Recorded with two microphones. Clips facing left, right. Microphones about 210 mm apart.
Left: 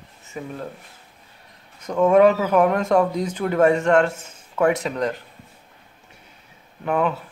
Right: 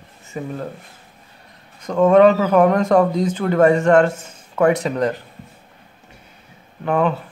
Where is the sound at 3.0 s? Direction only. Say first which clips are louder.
Right 4 dB; 35° right (ahead or behind).